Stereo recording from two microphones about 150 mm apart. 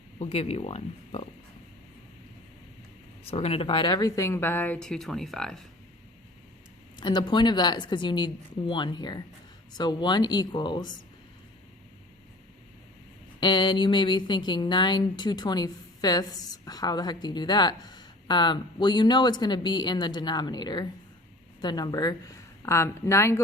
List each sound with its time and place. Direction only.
0.2 s speech: 45° left (ahead or behind)
3.2 s speech: 40° left (ahead or behind); by 5.5 s 5° left (ahead or behind)
6.9 s a woman's voice: 30° left (ahead or behind)
13.4 s speech: 30° left (ahead or behind)